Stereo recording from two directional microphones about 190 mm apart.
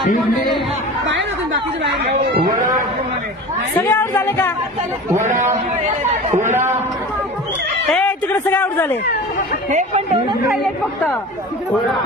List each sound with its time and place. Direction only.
1.0 s chatter: 75° right (ahead or behind)
3.9 s speech: 10° left (ahead or behind)
5.2 s speech: 40° right (ahead or behind)
7.9 s a man's voice: 10° left (ahead or behind)
9.7 s speech: 40° right (ahead or behind)